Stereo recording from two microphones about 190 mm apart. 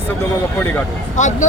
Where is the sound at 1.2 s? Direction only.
40° left (ahead or behind).